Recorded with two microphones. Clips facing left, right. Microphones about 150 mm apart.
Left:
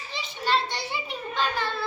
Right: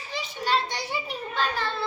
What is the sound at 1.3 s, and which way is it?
Child singing, 5° right (ahead or behind).